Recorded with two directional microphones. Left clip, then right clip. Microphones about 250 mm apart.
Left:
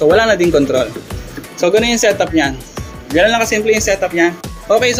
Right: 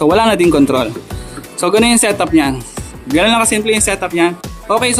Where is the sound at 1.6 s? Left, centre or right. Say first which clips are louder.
Even; centre.